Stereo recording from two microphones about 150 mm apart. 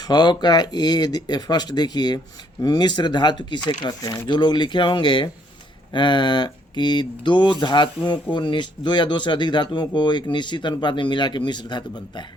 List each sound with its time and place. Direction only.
0.0 s speech: 30° left (ahead or behind)